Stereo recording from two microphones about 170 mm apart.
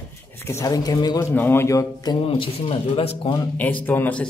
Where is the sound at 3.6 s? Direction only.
10° left (ahead or behind).